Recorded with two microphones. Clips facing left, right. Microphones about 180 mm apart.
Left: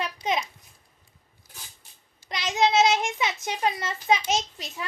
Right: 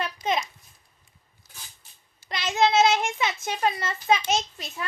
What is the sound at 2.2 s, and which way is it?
A child's voice, 15° left (ahead or behind).